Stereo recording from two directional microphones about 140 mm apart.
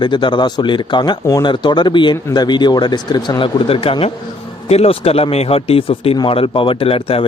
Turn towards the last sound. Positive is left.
turn(degrees=40)  # may be behind; listen again after turning